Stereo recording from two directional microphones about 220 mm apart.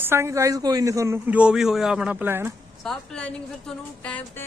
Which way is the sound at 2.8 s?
5° left (ahead or behind).